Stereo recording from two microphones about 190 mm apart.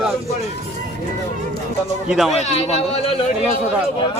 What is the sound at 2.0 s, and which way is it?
Speech, centre (ahead or behind).